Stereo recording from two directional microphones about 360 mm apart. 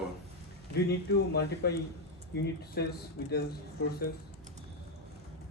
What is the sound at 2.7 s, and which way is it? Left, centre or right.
Speech, left.